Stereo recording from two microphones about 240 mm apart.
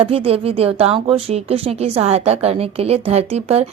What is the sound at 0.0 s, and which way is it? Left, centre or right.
Speech, right.